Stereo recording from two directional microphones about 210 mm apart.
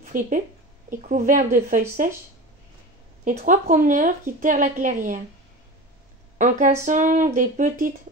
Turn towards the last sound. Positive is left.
turn(degrees=-40)  # may be behind; listen again after turning